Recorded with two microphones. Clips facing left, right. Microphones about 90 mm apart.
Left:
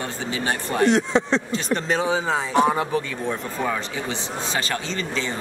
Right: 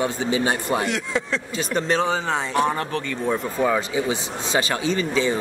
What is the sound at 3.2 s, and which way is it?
Speech, 10° right (ahead or behind).